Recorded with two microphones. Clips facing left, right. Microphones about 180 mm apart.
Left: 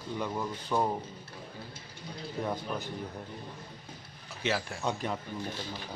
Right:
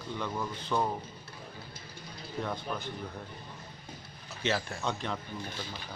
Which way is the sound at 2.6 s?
40° left (ahead or behind).